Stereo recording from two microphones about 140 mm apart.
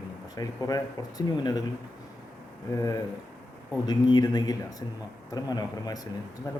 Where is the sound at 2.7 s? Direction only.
25° left (ahead or behind).